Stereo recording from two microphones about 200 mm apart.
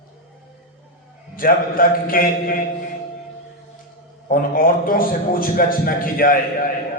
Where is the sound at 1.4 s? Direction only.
45° left (ahead or behind).